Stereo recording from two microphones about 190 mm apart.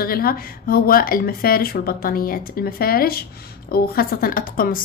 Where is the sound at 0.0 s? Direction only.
50° left (ahead or behind).